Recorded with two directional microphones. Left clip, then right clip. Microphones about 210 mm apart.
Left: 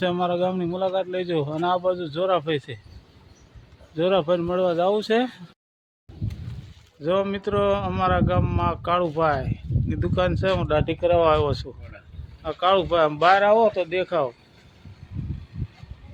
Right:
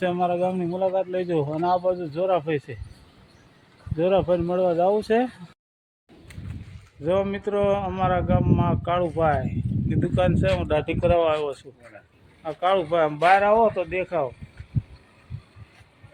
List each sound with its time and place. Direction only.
0.0 s a man's voice: 5° left (ahead or behind)
3.9 s a man's voice: centre (ahead or behind)
7.0 s a man's voice: 5° right (ahead or behind)
11.1 s speech: 25° left (ahead or behind)
12.4 s speech: 15° left (ahead or behind)